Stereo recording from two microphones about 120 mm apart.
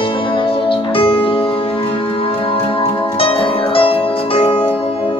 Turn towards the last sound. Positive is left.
turn(degrees=50)  # may be behind; listen again after turning